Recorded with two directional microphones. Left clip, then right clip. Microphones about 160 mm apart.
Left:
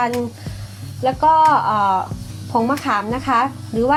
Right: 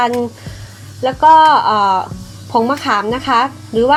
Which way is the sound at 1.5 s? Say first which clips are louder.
Right 4 dB; 25° right (ahead or behind).